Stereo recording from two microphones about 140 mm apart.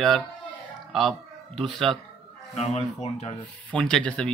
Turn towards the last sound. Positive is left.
turn(degrees=5)  # may be behind; listen again after turning